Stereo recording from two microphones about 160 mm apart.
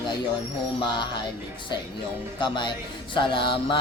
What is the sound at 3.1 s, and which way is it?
Mantra, 30° left (ahead or behind).